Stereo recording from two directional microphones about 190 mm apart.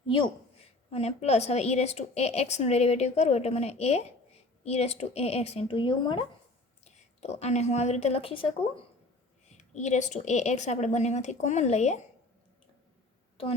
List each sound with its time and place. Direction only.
0.9 s a woman's voice: 35° left (ahead or behind)
7.2 s a woman's voice: 35° left (ahead or behind)
9.6 s a woman's voice: 40° left (ahead or behind)